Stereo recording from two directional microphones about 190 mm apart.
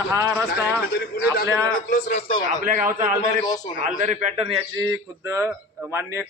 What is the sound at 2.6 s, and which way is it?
A man's voice, 45° right (ahead or behind).